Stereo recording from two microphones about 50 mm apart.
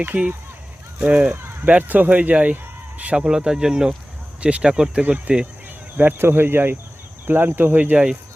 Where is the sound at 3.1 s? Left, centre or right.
Centre.